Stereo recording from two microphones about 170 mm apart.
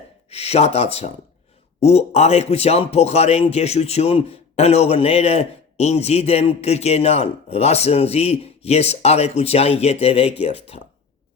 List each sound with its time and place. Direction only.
0.3 s a man's voice: 35° left (ahead or behind)